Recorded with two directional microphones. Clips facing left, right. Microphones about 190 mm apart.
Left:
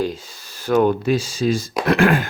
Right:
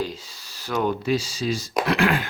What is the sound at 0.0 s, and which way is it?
Speech, 50° left (ahead or behind).